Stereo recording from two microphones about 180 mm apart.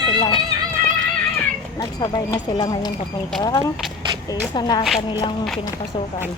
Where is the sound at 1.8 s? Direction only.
20° left (ahead or behind).